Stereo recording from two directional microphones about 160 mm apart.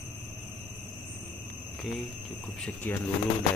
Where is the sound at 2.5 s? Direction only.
5° left (ahead or behind).